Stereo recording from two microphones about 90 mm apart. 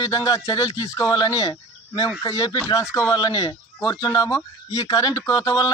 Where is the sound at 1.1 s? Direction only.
45° left (ahead or behind).